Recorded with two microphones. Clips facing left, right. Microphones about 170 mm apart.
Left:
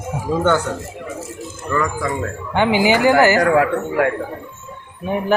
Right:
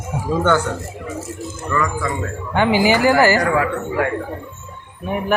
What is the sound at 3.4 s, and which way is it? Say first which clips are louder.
Speech: left 3 dB; 55° left (ahead or behind).